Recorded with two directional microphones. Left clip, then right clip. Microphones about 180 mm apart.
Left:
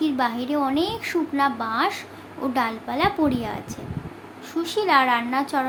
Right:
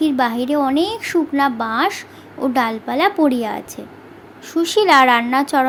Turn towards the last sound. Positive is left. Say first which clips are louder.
# right 7 dB
turn(degrees=-40)  # may be behind; listen again after turning